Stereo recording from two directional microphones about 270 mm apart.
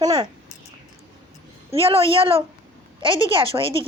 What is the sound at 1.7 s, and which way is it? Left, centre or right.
Speech, right.